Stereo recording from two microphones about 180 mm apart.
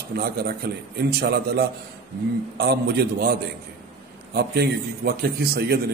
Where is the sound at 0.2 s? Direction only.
60° right (ahead or behind).